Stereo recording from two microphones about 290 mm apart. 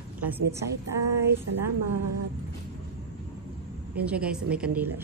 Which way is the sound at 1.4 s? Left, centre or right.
Right.